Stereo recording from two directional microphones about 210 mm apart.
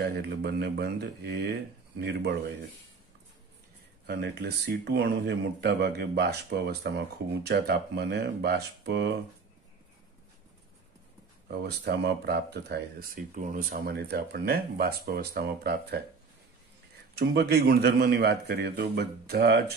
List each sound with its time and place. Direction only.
0.0 s speech: 50° right (ahead or behind)
4.1 s speech: 50° right (ahead or behind)
11.5 s speech: 50° right (ahead or behind)
17.1 s speech: 50° right (ahead or behind)